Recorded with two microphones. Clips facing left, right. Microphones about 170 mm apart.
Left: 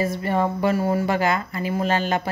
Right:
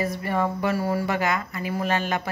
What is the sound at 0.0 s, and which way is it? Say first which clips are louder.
Speech: left 3 dB; 25° left (ahead or behind).